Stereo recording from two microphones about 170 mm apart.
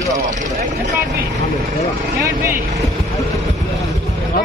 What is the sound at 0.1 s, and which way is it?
Vehicle, 45° right (ahead or behind).